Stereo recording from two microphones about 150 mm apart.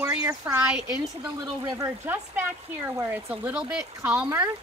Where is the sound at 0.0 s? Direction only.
15° right (ahead or behind).